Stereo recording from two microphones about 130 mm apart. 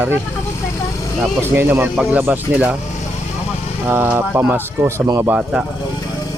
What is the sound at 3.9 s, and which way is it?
Speech, 15° right (ahead or behind).